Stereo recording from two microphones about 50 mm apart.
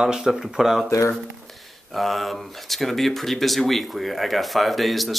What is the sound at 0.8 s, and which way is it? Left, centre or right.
Speech, left.